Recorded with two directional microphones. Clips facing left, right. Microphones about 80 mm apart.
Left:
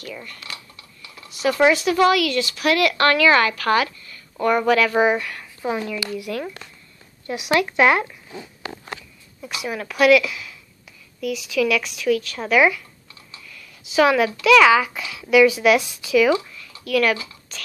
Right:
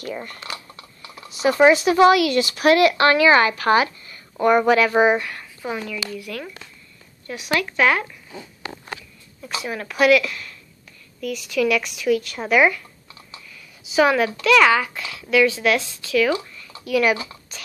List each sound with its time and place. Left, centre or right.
0.0 s speech: right
1.4 s speech: right; by 5.5 s centre
5.9 s speech: left
9.6 s speech: centre
16.8 s speech: centre